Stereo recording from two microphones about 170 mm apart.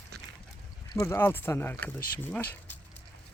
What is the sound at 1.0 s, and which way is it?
Speech, 10° left (ahead or behind).